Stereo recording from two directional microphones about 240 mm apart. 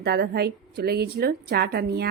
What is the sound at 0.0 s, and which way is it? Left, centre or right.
A woman's voice, right.